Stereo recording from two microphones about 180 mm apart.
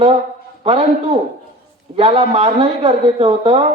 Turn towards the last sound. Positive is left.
turn(degrees=-30)  # may be behind; listen again after turning